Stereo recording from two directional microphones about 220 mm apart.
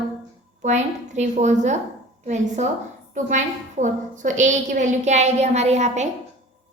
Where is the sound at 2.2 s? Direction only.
30° right (ahead or behind).